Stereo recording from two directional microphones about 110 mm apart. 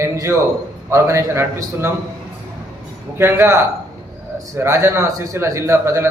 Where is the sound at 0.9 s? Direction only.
25° right (ahead or behind).